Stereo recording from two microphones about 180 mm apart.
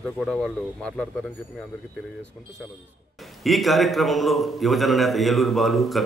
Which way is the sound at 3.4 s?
Centre (ahead or behind).